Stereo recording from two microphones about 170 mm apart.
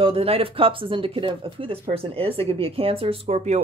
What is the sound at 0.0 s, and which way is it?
Speech, 35° right (ahead or behind).